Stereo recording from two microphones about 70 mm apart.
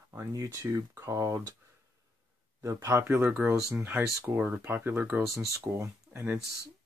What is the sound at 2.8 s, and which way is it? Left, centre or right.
Speech, right.